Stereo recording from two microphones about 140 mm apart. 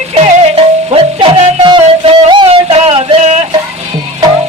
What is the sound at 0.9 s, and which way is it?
Music, 40° right (ahead or behind).